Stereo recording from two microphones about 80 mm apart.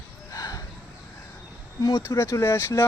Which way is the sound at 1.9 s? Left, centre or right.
Left.